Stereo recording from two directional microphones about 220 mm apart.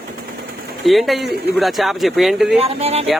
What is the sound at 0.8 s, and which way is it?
Speech, centre (ahead or behind).